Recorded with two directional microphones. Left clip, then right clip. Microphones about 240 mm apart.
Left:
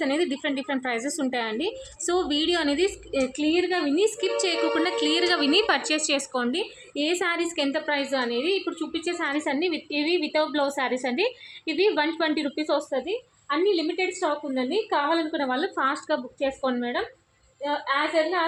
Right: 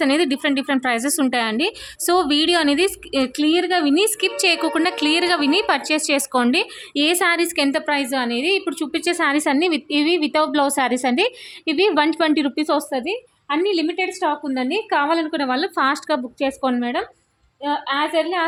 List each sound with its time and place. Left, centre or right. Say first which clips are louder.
0.0 s a woman's voice: right 7 dB; right